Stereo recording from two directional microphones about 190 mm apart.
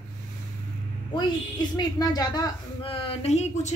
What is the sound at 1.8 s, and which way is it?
A woman's voice, 20° left (ahead or behind).